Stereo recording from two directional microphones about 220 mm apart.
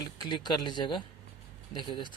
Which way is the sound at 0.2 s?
20° left (ahead or behind).